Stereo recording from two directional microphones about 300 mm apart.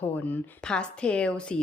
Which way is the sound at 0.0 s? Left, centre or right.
Centre.